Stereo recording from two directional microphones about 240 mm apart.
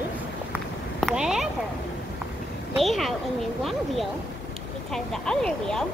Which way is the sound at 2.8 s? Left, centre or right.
Centre.